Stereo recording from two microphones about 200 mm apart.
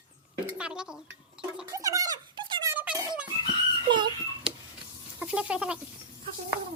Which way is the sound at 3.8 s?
25° right (ahead or behind).